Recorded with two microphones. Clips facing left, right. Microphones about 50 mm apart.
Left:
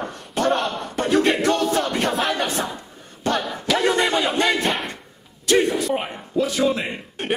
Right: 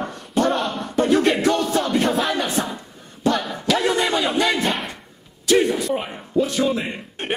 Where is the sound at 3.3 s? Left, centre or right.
Centre.